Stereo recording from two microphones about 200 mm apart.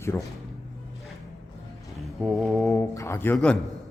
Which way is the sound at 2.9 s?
15° left (ahead or behind).